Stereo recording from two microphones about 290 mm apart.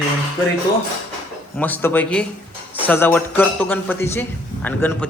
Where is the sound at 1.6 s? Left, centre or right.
Centre.